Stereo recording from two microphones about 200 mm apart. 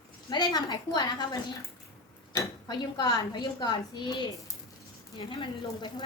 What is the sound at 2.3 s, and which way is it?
Speech, 20° left (ahead or behind).